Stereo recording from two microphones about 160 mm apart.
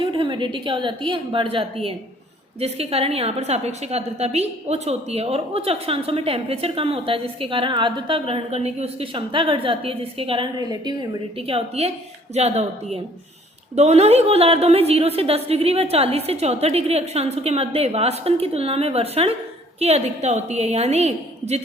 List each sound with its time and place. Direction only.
0.0 s a woman's voice: 30° right (ahead or behind)